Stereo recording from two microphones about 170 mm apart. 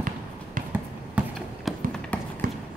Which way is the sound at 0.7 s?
10° right (ahead or behind).